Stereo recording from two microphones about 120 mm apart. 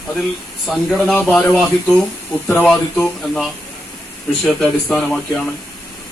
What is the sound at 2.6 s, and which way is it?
Speech, 5° left (ahead or behind).